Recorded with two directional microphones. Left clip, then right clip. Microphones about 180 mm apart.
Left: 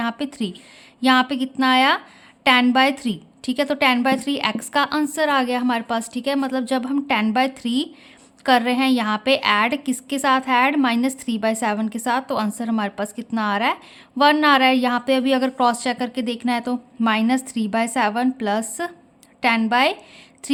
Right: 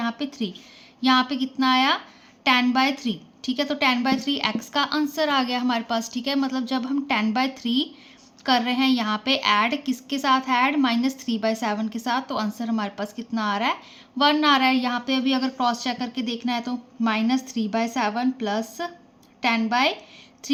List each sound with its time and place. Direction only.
0.0 s a woman's voice: 35° left (ahead or behind)